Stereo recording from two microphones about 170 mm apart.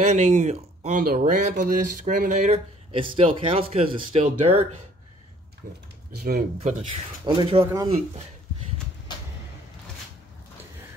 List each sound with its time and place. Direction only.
0.0 s speech: 45° right (ahead or behind)
1.0 s speech: 60° right (ahead or behind); by 4.6 s 40° right (ahead or behind)
5.6 s speech: 55° right (ahead or behind)
7.2 s speech: 25° right (ahead or behind)